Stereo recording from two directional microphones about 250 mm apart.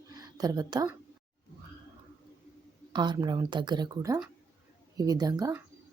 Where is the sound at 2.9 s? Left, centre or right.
Centre.